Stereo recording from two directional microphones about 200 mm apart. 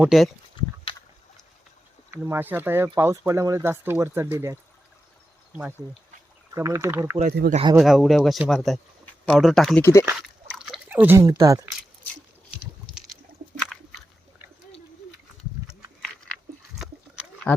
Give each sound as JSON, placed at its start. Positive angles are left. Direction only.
{"t": 0.0, "sound": "speech", "side_deg": 0}
{"t": 0.6, "sound": "a sound", "side_deg": 20}
{"t": 2.0, "sound": "speech", "side_deg": -10}
{"t": 5.5, "sound": "speech", "side_deg": -5}
{"t": 7.5, "sound": "speech", "side_deg": -25}
{"t": 7.8, "sound": "speech", "side_deg": 0}
{"t": 9.8, "sound": "speech", "side_deg": 15}
{"t": 10.1, "sound": "a sound", "side_deg": 0}